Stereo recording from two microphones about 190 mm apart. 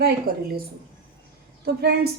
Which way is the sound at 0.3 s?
50° right (ahead or behind).